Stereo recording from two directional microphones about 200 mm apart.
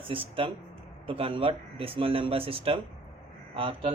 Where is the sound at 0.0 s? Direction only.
25° right (ahead or behind).